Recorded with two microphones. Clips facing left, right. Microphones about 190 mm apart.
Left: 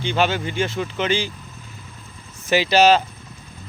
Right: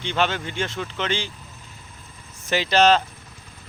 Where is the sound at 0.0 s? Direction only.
5° left (ahead or behind).